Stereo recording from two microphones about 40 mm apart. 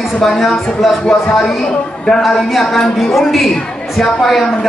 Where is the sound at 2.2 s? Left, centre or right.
Centre.